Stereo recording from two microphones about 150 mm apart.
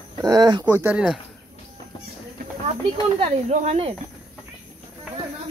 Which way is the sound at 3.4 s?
45° right (ahead or behind).